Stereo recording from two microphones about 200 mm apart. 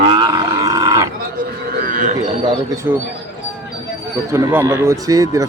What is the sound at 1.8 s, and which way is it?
Speech, 40° right (ahead or behind).